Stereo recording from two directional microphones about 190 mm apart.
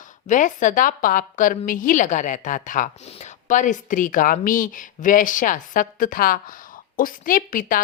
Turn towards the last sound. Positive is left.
turn(degrees=45)  # may be behind; listen again after turning